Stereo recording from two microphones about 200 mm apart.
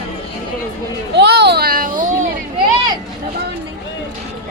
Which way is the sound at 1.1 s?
55° right (ahead or behind).